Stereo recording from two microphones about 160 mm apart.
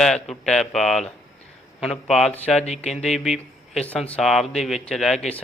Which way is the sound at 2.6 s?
45° left (ahead or behind).